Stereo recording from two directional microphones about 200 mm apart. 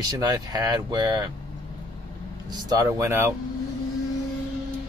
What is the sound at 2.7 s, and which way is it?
Speech, 15° right (ahead or behind).